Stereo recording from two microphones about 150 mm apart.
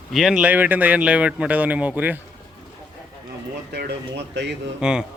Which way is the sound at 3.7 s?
90° right.